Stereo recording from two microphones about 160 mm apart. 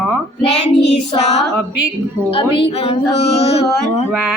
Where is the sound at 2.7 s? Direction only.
40° left (ahead or behind).